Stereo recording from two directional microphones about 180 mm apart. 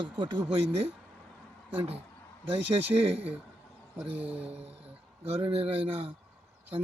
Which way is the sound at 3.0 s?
35° right (ahead or behind).